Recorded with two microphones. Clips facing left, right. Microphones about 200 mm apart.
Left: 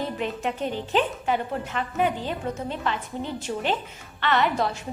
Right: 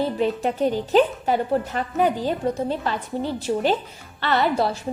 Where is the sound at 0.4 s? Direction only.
40° right (ahead or behind).